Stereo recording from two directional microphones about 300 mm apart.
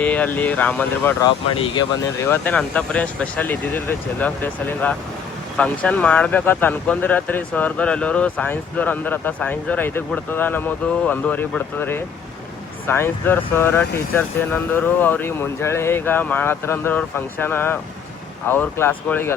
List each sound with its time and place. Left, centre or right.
0.0 s speech: centre
1.5 s speech: centre
2.2 s speech: centre